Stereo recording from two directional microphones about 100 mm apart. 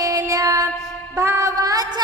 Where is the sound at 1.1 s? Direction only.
30° right (ahead or behind).